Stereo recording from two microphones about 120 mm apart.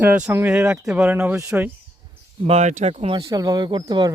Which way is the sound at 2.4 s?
65° right (ahead or behind).